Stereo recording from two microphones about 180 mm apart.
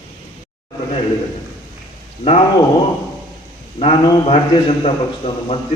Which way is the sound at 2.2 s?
35° left (ahead or behind).